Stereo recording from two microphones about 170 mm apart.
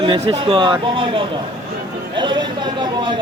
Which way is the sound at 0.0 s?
30° right (ahead or behind).